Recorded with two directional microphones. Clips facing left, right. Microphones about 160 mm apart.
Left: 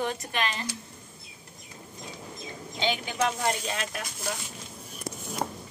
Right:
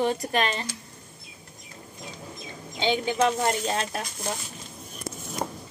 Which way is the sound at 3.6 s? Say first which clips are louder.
Right 5 dB; 35° right (ahead or behind).